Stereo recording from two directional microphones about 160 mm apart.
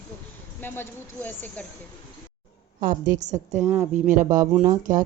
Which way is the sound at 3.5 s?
45° right (ahead or behind).